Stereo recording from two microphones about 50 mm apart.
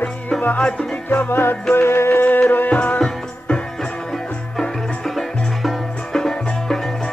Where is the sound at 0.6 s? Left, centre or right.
Left.